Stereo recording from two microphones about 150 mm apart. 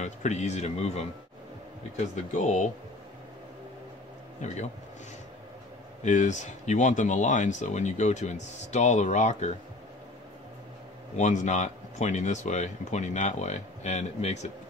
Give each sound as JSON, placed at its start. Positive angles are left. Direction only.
{"t": 0.0, "sound": "speech", "side_deg": 50}
{"t": 2.0, "sound": "speech", "side_deg": 55}
{"t": 6.0, "sound": "speech", "side_deg": 55}
{"t": 11.1, "sound": "speech", "side_deg": 50}